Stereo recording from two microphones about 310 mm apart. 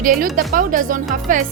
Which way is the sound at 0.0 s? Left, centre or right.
Right.